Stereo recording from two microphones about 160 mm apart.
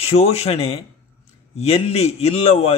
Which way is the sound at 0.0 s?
40° left (ahead or behind).